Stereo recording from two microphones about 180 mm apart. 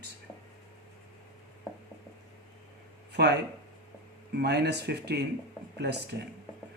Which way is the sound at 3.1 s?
70° right (ahead or behind).